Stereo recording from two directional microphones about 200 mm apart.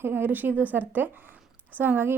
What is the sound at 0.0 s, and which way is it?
A woman's voice, 10° right (ahead or behind).